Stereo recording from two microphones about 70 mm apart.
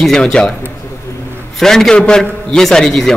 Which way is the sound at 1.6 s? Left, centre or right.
Centre.